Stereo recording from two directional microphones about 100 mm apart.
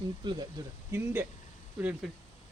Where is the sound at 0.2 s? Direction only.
50° right (ahead or behind).